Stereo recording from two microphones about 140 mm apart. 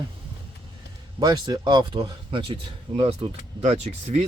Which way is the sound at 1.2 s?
30° right (ahead or behind).